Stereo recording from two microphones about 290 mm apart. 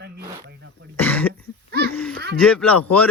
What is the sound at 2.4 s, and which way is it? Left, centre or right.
Speech, centre.